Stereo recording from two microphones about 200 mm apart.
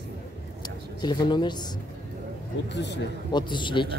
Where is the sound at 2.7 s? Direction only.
60° left (ahead or behind).